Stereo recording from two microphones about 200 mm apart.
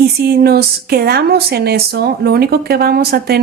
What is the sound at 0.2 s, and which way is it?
Speech, 50° right (ahead or behind).